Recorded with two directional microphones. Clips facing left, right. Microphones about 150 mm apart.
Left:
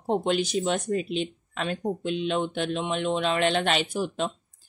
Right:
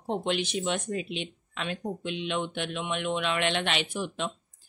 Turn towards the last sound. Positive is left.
turn(degrees=40)  # may be behind; listen again after turning